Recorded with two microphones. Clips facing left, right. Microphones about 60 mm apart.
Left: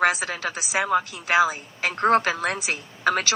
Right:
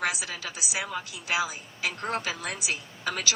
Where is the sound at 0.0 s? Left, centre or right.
Left.